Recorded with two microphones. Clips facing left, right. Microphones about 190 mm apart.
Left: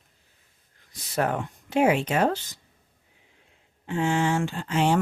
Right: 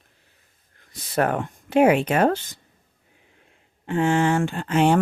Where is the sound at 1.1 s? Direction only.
60° right (ahead or behind).